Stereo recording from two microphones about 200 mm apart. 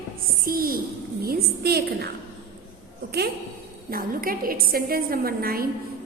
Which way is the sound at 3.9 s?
45° right (ahead or behind).